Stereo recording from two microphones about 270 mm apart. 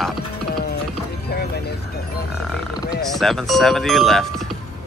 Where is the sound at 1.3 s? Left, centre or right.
Left.